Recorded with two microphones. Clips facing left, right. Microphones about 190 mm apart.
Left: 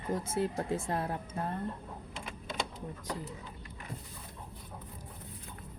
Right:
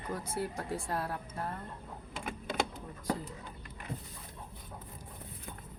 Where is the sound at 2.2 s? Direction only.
60° right (ahead or behind).